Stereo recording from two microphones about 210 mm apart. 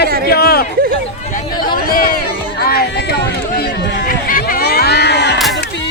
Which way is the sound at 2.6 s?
50° left (ahead or behind).